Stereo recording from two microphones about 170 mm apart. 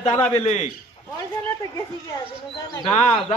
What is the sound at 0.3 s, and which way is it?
Speech, 40° left (ahead or behind).